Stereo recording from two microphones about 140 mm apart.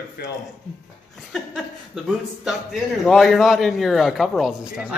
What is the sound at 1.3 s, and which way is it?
A man's voice, centre (ahead or behind).